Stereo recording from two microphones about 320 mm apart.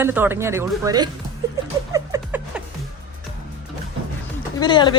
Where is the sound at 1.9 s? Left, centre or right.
Centre.